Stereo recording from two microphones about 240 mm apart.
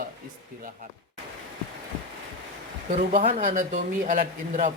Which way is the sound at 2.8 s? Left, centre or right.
Right.